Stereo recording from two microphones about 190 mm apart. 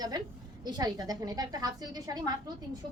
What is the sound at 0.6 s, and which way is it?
A woman's voice, 20° right (ahead or behind).